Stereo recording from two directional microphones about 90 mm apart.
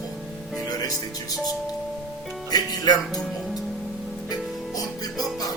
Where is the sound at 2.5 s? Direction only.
45° left (ahead or behind).